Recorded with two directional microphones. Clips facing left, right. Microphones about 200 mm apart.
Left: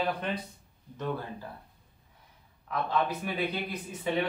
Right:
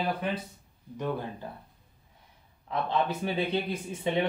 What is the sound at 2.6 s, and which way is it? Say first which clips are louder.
A man's voice: right 1 dB; 25° right (ahead or behind).